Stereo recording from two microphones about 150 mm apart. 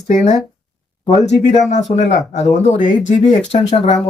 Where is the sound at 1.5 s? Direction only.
50° left (ahead or behind).